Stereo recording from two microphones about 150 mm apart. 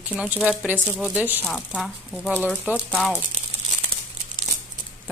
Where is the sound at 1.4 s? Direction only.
Centre (ahead or behind).